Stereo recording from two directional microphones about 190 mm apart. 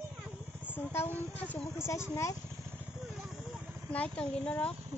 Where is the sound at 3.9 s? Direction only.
5° left (ahead or behind).